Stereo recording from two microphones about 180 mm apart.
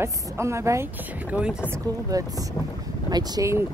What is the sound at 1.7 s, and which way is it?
Speech, 20° right (ahead or behind).